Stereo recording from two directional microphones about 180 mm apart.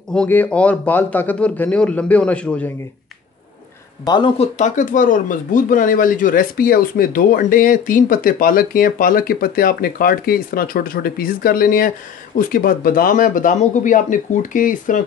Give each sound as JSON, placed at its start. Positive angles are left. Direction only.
{"t": 0.1, "sound": "a man's voice", "side_deg": 5}
{"t": 4.0, "sound": "speech", "side_deg": 25}
{"t": 4.6, "sound": "speech", "side_deg": 45}